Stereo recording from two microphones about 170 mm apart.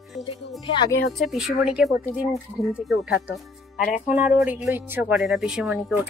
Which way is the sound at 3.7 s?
50° left (ahead or behind).